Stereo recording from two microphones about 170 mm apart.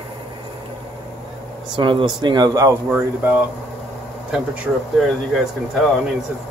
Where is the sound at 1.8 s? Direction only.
25° right (ahead or behind).